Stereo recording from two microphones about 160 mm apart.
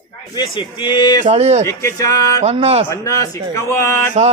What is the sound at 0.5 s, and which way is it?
Speech, 30° left (ahead or behind).